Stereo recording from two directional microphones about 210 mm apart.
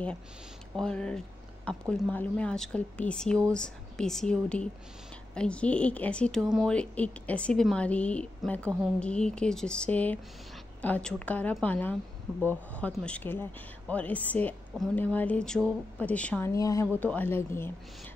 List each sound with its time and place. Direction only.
0.7 s a woman's voice: 5° left (ahead or behind)